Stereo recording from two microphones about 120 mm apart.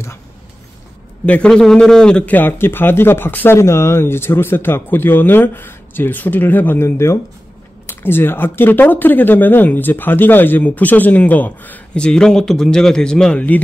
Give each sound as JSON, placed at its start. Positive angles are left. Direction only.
{"t": 1.2, "sound": "a man's voice", "side_deg": 10}